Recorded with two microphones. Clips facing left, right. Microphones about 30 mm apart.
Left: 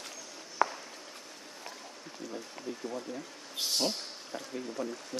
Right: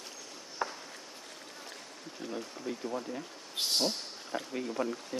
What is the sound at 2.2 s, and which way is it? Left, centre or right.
Stream, right.